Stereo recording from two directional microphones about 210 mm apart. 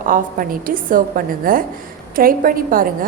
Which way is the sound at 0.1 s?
40° right (ahead or behind).